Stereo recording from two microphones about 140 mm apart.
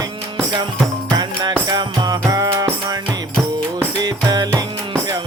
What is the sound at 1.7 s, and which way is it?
Music, 30° right (ahead or behind).